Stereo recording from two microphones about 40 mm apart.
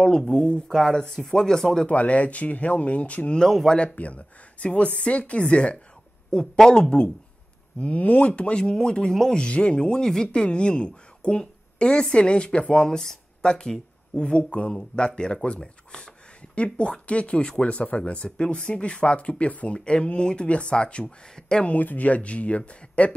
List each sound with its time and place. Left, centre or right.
0.2 s speech: centre
1.9 s speech: left
3.3 s speech: centre
3.9 s speech: left
6.3 s speech: centre
7.8 s speech: left
9.3 s speech: left
21.7 s speech: left